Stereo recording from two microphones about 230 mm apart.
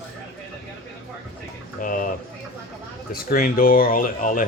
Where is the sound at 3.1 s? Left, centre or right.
Left.